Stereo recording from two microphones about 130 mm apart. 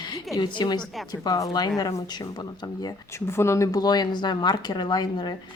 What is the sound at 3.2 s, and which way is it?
A woman's voice, 20° left (ahead or behind).